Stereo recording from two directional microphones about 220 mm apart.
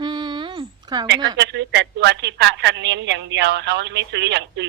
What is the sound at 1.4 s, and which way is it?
A woman's voice, 50° right (ahead or behind).